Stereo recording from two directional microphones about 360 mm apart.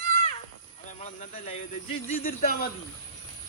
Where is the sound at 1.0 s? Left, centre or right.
Centre.